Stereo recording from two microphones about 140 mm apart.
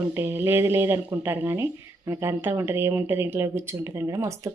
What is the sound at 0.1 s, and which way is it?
Speech, 15° right (ahead or behind).